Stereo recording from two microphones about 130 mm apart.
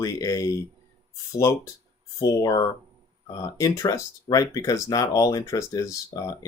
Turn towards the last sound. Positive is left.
turn(degrees=25)  # may be behind; listen again after turning